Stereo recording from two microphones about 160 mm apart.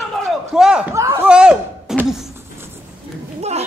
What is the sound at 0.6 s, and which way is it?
Speech, 5° right (ahead or behind).